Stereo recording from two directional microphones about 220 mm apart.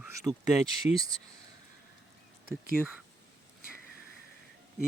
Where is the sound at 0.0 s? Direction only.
15° right (ahead or behind).